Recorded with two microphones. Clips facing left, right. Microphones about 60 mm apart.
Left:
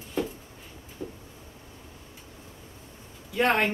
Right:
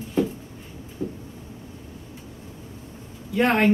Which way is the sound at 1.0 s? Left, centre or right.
Right.